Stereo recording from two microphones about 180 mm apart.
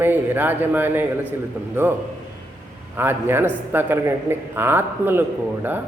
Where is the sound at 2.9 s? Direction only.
10° right (ahead or behind).